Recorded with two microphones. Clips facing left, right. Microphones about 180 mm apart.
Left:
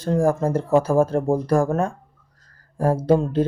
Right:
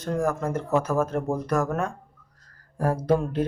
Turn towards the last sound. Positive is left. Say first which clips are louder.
# left 5 dB
turn(degrees=25)  # may be behind; listen again after turning